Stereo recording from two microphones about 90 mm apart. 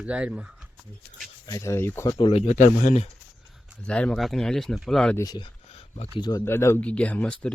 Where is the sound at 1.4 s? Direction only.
35° left (ahead or behind).